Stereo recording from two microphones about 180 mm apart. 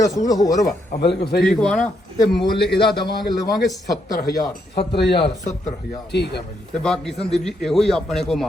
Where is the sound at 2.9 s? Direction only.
25° left (ahead or behind).